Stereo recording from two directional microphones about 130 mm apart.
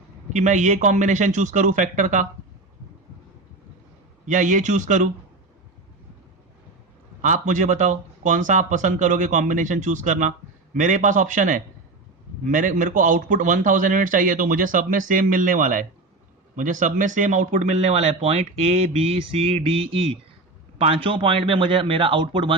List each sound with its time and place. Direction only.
0.3 s speech: 65° right (ahead or behind)
4.3 s speech: 75° right (ahead or behind)
7.2 s a man's voice: 75° right (ahead or behind); by 22.5 s 40° right (ahead or behind)